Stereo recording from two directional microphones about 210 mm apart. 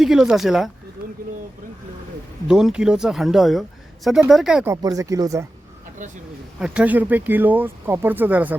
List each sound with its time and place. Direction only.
0.0 s speech: centre (ahead or behind)
2.5 s speech: 5° right (ahead or behind)
4.7 s speech: 15° right (ahead or behind)
6.6 s speech: 5° right (ahead or behind)